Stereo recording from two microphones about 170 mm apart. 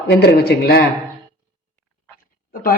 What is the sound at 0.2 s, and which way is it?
Speech, 70° left (ahead or behind).